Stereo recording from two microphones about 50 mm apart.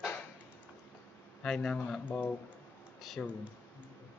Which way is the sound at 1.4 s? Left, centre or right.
Centre.